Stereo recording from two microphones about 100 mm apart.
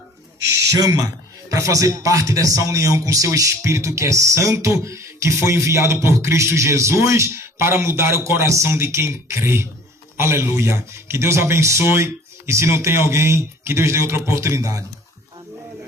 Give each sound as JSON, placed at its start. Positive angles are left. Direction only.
{"t": 0.4, "sound": "a man's voice", "side_deg": -35}